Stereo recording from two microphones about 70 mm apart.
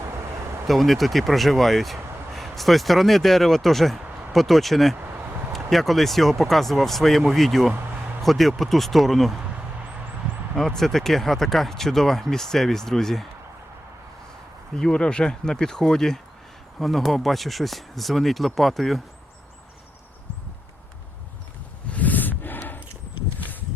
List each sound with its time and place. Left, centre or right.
0.7 s speech: centre
10.6 s speech: centre
14.8 s speech: centre
21.9 s a sound: left
23.4 s walk: left